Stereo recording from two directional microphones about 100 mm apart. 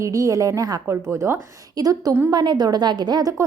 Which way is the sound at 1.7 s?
40° right (ahead or behind).